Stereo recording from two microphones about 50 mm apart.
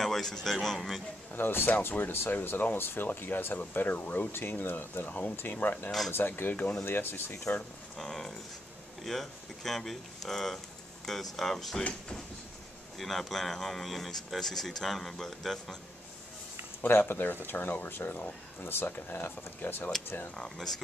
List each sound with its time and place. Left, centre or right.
0.0 s speech: centre
1.3 s speech: left
4.3 s speech: left
5.9 s speech: centre
6.1 s speech: left
6.9 s speech: left
7.9 s speech: centre
12.9 s speech: centre
16.8 s speech: left
20.3 s speech: centre